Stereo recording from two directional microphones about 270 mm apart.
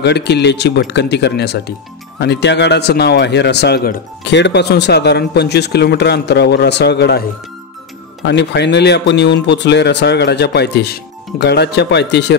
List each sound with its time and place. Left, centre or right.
0.0 s speech: left